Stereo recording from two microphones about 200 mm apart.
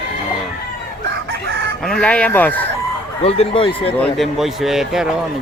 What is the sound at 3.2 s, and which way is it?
Speech, 30° left (ahead or behind).